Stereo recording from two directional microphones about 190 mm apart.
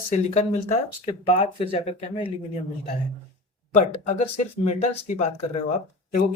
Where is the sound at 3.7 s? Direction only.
35° left (ahead or behind).